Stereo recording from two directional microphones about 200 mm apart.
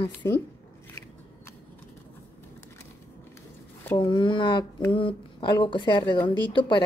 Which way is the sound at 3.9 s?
20° left (ahead or behind).